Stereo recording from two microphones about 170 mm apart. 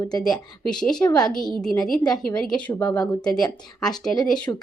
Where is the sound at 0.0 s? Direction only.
25° left (ahead or behind).